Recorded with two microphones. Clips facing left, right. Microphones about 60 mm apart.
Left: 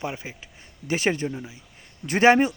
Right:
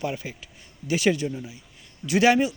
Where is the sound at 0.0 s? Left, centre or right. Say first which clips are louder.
Right 2 dB; left.